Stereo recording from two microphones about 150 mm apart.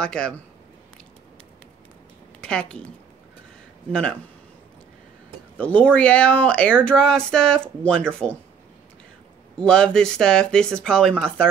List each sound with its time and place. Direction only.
0.0 s speech: 5° left (ahead or behind)
2.4 s speech: 5° left (ahead or behind)
3.9 s speech: 5° left (ahead or behind)
5.6 s speech: 10° left (ahead or behind)
9.6 s speech: 5° left (ahead or behind)